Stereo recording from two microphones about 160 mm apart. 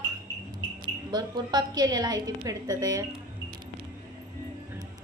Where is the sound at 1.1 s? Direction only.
25° right (ahead or behind).